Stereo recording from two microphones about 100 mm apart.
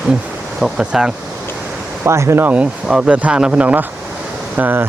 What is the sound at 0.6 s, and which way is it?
Speech, 5° right (ahead or behind).